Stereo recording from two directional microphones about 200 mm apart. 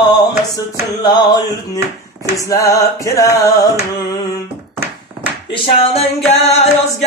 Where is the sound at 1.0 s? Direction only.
20° left (ahead or behind).